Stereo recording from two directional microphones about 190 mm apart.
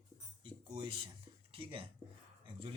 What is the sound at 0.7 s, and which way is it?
Speech, 25° right (ahead or behind).